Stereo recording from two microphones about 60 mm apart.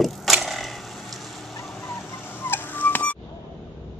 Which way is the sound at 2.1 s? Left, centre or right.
Left.